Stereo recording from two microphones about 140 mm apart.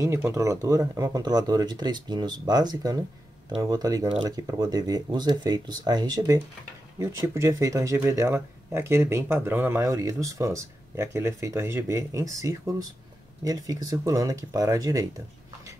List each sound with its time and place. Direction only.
0.0 s speech: 20° right (ahead or behind)